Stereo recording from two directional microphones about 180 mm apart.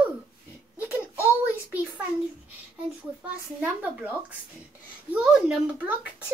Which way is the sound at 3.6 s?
10° right (ahead or behind).